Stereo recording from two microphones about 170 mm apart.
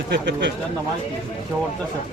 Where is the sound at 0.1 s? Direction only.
85° right.